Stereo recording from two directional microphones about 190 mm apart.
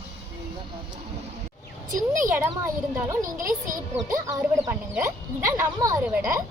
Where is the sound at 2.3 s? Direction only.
10° right (ahead or behind).